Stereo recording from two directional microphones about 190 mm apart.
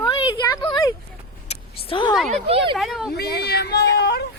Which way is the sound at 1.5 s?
25° left (ahead or behind).